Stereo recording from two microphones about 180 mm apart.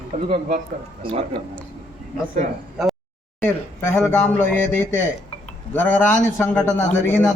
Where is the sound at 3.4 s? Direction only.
15° left (ahead or behind).